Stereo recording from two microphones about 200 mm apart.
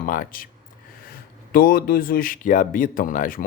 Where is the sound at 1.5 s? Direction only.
50° left (ahead or behind).